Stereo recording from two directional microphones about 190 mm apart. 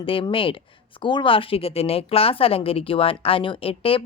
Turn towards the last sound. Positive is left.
turn(degrees=30)  # may be behind; listen again after turning